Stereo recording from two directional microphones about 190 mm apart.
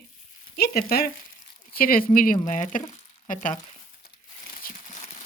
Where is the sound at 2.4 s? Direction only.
40° left (ahead or behind).